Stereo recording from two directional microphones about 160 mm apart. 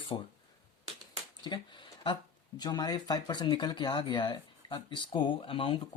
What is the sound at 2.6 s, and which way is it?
Speech, 25° left (ahead or behind).